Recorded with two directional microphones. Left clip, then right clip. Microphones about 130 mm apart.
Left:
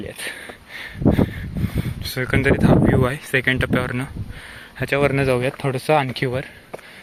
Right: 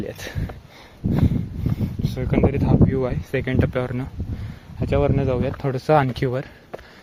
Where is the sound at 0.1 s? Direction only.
50° right (ahead or behind).